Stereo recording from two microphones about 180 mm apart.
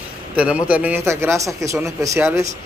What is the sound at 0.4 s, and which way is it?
A man's voice, 5° right (ahead or behind).